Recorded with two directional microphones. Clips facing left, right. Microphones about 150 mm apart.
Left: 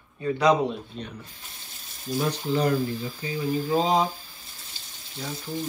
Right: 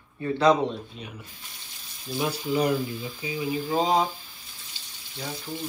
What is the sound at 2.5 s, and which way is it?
Speech, 15° right (ahead or behind).